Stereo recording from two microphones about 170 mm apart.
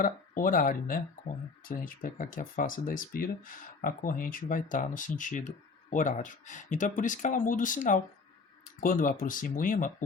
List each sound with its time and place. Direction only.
0.0 s speech: 55° left (ahead or behind)